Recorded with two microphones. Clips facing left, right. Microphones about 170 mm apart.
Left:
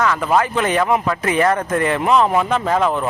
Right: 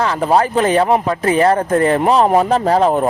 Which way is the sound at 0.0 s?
35° right (ahead or behind).